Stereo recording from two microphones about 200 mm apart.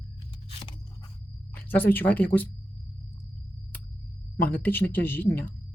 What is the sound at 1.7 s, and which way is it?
Speech, 10° left (ahead or behind).